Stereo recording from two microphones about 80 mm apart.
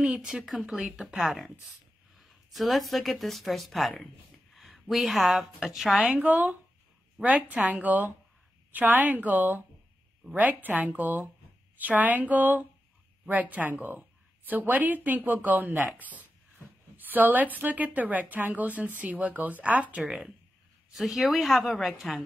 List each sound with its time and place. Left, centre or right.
0.0 s a woman's voice: centre
6.1 s a woman's voice: centre
20.0 s speech: centre